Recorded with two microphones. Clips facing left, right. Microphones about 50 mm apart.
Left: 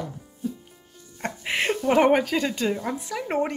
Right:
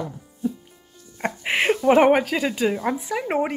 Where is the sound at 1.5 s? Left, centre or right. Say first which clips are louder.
Right 5 dB; centre.